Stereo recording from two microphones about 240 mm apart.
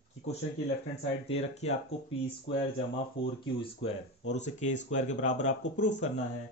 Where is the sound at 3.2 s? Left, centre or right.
Left.